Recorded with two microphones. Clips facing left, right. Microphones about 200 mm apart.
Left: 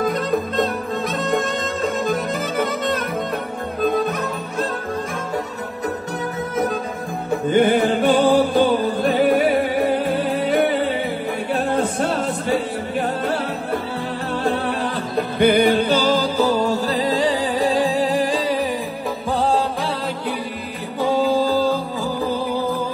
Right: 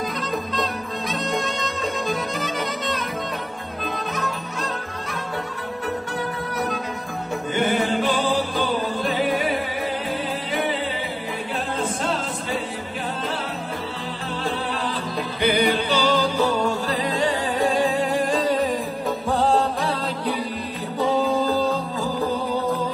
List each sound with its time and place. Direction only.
0.0 s music: 55° left (ahead or behind)
7.4 s music: 55° left (ahead or behind)
15.1 s music: 55° left (ahead or behind)
16.2 s music: centre (ahead or behind)
21.0 s music: centre (ahead or behind)